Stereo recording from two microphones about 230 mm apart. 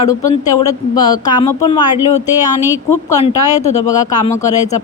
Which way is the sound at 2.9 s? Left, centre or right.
Centre.